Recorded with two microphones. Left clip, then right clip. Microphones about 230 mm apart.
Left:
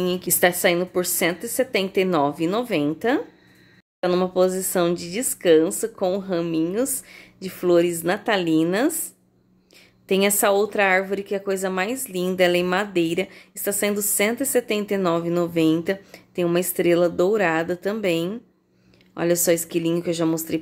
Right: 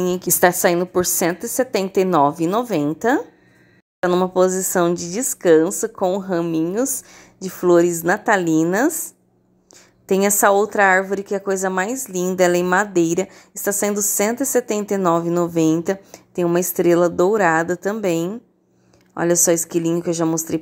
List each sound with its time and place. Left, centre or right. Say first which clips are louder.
0.1 s a woman's voice: right 5 dB; centre
4.0 s a woman's voice: right 3 dB; centre
10.0 s a woman's voice: right 4 dB; centre